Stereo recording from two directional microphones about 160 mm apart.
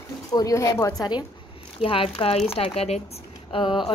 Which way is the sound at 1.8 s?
35° left (ahead or behind).